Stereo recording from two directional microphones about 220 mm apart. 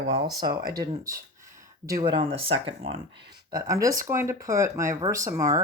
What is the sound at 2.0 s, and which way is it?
Speech, 20° right (ahead or behind).